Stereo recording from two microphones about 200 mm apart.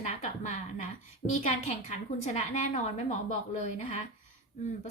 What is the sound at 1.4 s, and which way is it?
Speech, 35° left (ahead or behind).